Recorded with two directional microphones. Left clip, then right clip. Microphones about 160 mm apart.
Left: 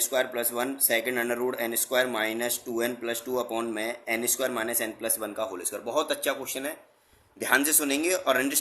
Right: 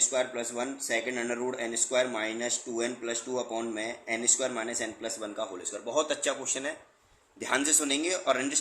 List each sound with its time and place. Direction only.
0.0 s speech: 45° left (ahead or behind); by 6.7 s 20° left (ahead or behind)
7.4 s speech: 35° left (ahead or behind)